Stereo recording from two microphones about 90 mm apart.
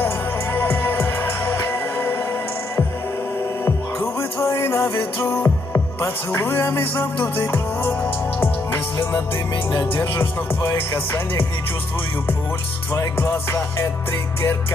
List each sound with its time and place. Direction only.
0.0 s music: 25° left (ahead or behind)
3.6 s music: 30° left (ahead or behind)
12.9 s music: 30° left (ahead or behind)